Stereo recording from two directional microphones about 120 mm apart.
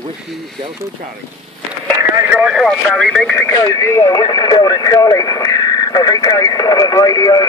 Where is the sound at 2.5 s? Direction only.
5° right (ahead or behind).